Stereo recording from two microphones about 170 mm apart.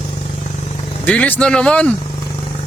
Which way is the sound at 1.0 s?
10° left (ahead or behind).